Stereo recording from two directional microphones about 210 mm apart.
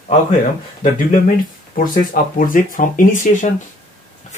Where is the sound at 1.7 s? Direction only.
40° left (ahead or behind).